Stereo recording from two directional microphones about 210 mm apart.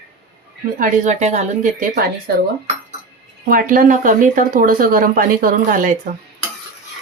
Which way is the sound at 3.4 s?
40° right (ahead or behind).